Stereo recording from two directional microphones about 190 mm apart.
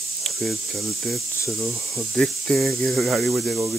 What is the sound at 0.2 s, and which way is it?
Speech, centre (ahead or behind).